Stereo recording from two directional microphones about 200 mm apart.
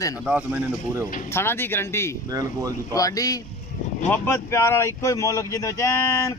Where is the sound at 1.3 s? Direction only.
10° left (ahead or behind).